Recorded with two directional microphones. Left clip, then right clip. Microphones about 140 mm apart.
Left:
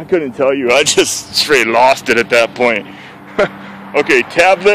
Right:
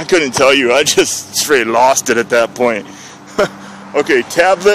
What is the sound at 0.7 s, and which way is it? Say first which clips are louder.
Speech: even; 10° right (ahead or behind).